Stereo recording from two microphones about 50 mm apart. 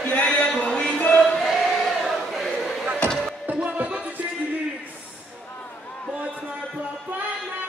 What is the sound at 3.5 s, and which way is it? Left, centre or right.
Music, right.